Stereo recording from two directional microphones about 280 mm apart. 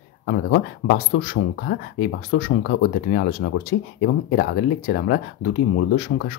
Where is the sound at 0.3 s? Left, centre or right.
Left.